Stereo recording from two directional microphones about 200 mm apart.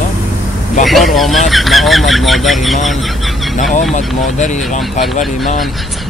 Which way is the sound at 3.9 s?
35° left (ahead or behind).